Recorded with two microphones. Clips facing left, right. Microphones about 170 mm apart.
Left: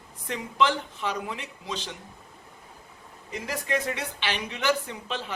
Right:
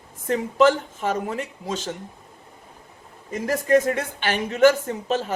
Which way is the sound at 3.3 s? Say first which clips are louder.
Right 10 dB; 45° right (ahead or behind).